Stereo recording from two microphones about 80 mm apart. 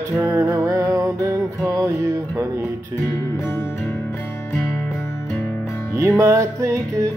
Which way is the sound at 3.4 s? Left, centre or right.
Left.